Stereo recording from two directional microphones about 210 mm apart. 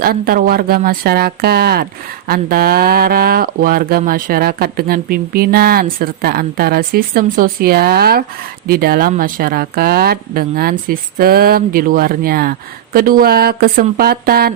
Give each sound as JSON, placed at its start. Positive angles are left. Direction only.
{"t": 0.0, "sound": "speech", "side_deg": -45}